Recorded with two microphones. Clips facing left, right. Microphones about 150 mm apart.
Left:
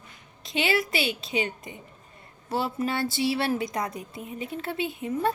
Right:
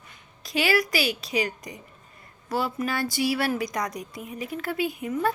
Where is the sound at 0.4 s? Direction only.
25° left (ahead or behind).